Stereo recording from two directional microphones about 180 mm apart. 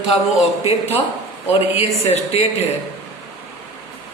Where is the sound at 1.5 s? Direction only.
35° left (ahead or behind).